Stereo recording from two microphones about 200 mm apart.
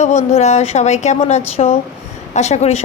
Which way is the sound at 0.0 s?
35° left (ahead or behind).